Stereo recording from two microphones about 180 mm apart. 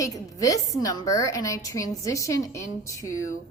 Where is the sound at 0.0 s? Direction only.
20° left (ahead or behind).